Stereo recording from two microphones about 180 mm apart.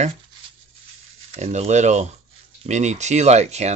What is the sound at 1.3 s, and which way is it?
Speech, 40° right (ahead or behind).